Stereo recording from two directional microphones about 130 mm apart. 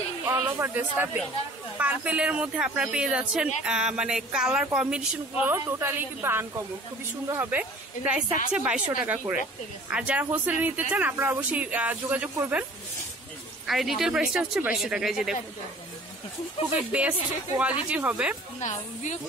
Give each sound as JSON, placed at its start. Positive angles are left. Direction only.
{"t": 0.2, "sound": "speech", "side_deg": -15}
{"t": 5.5, "sound": "a woman's voice", "side_deg": -20}
{"t": 13.7, "sound": "speech", "side_deg": 0}
{"t": 16.9, "sound": "speech", "side_deg": -10}
{"t": 18.6, "sound": "a woman's voice", "side_deg": 65}